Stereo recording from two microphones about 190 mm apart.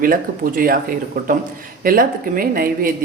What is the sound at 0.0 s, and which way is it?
Speech, 50° right (ahead or behind).